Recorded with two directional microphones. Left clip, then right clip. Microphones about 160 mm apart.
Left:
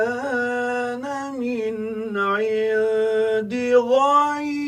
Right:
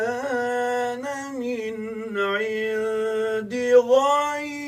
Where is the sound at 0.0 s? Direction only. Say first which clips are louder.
Left 2 dB; 25° left (ahead or behind).